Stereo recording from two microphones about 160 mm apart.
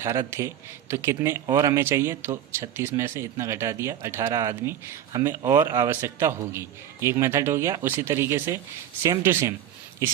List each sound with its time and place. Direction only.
0.0 s speech: 15° right (ahead or behind)